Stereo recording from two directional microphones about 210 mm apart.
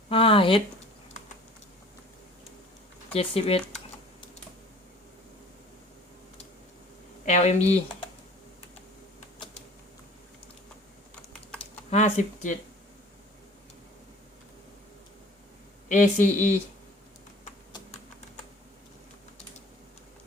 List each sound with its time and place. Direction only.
0.1 s speech: 25° left (ahead or behind)
3.2 s speech: 25° left (ahead or behind)
7.3 s speech: 35° left (ahead or behind)
11.9 s speech: 35° left (ahead or behind)
15.9 s speech: 35° left (ahead or behind)